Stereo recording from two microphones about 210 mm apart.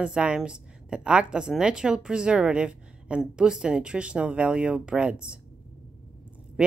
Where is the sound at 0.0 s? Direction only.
5° right (ahead or behind).